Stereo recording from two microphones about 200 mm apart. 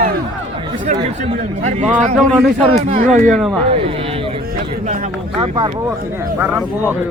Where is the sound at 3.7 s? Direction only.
30° right (ahead or behind).